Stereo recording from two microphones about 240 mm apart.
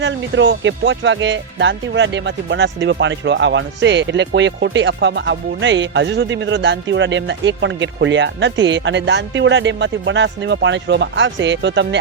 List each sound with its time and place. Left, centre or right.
0.0 s speech: right